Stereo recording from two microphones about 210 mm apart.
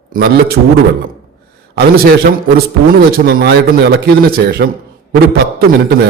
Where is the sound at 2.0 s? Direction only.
45° right (ahead or behind).